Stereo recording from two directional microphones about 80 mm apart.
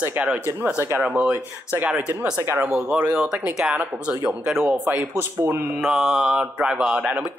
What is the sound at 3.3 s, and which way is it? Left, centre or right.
Mantra, centre.